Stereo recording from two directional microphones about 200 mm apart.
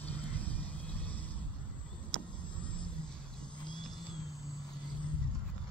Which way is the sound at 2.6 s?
5° left (ahead or behind).